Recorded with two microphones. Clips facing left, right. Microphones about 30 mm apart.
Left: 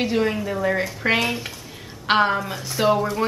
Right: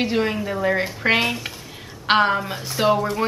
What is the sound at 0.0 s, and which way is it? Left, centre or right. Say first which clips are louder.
A woman's voice: even; centre.